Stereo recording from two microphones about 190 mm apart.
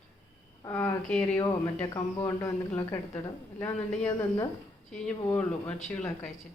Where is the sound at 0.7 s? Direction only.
10° left (ahead or behind).